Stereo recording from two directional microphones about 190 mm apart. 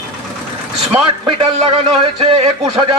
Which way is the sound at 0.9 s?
25° right (ahead or behind).